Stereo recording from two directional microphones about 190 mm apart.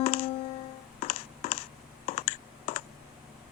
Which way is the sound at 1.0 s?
30° left (ahead or behind).